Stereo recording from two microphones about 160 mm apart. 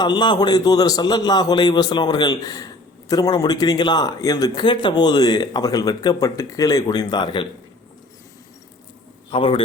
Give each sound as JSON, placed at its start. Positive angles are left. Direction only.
{"t": 0.0, "sound": "a man's voice", "side_deg": 25}
{"t": 9.3, "sound": "a man's voice", "side_deg": 35}